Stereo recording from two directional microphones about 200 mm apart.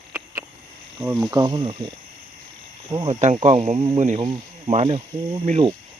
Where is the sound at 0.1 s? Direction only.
15° right (ahead or behind).